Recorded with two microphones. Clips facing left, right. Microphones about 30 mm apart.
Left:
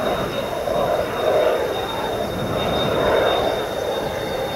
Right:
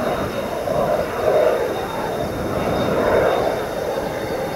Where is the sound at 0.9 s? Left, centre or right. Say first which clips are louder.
Right 1 dB; centre.